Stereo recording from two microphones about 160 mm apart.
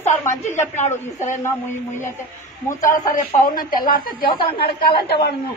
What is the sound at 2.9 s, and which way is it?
Speech, 60° left (ahead or behind).